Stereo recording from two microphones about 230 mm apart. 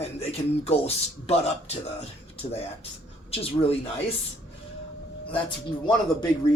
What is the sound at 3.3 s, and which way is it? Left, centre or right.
Speech, left.